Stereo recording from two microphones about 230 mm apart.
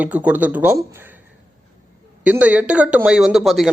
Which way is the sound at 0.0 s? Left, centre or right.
Centre.